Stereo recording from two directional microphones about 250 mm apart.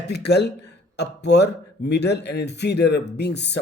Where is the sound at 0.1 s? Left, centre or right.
Left.